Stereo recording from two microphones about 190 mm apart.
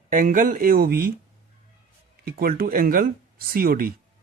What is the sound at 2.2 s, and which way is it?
Speech, 50° right (ahead or behind).